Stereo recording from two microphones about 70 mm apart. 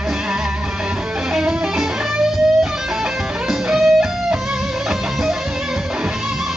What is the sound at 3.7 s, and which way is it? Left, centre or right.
Music, centre.